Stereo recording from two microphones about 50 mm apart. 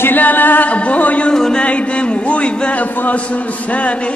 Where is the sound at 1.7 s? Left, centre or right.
Left.